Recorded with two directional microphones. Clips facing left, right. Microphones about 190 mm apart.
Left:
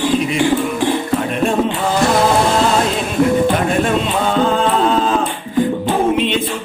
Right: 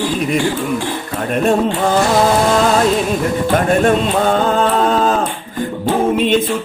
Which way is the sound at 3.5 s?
45° right (ahead or behind).